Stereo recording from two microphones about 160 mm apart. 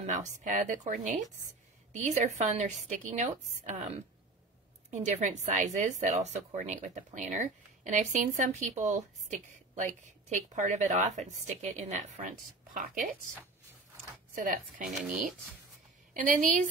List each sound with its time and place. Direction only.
0.0 s speech: 45° right (ahead or behind)
14.4 s speech: 60° right (ahead or behind)
14.9 s speech: 5° right (ahead or behind)
16.1 s a woman's voice: 55° right (ahead or behind)